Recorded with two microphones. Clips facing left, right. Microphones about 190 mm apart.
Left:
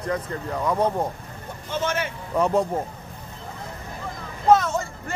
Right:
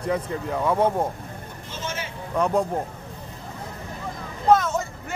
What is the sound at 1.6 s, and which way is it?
Speech, 60° left (ahead or behind).